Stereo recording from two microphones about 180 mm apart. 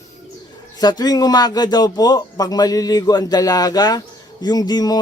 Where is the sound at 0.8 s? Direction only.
20° left (ahead or behind).